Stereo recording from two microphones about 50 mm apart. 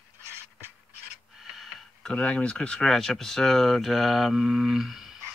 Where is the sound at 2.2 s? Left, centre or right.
Left.